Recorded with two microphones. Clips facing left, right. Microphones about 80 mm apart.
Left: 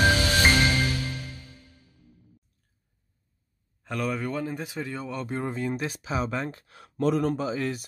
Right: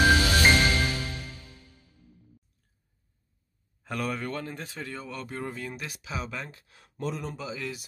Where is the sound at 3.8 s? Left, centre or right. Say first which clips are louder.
Left 2 dB; centre; by 6.6 s left.